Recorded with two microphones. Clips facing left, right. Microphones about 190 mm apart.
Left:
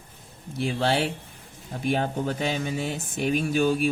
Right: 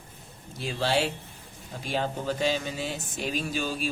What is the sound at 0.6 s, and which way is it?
Speech, 60° left (ahead or behind).